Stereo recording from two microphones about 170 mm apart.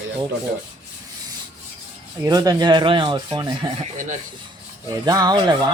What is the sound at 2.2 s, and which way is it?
Speech, 20° right (ahead or behind).